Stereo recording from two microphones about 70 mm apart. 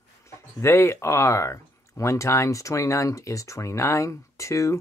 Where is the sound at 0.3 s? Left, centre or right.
Left.